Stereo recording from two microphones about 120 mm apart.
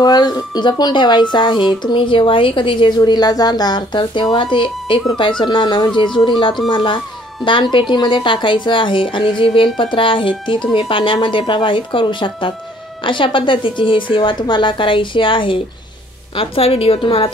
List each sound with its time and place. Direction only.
0.0 s speech: 35° left (ahead or behind)
3.0 s a woman's voice: 35° left (ahead or behind); by 17.3 s 50° left (ahead or behind)